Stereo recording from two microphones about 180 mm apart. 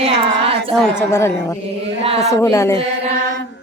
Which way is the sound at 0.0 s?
30° right (ahead or behind).